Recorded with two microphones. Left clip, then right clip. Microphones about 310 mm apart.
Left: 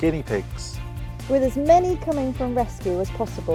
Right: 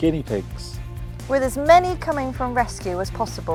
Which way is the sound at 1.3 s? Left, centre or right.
Right.